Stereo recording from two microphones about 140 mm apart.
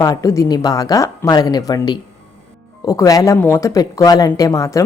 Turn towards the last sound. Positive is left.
turn(degrees=25)  # may be behind; listen again after turning